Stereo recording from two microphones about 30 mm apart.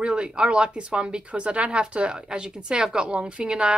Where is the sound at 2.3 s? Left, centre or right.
Right.